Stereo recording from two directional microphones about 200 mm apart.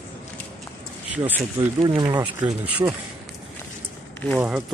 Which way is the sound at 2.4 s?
5° right (ahead or behind).